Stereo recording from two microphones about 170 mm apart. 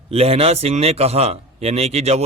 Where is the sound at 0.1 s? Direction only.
35° right (ahead or behind).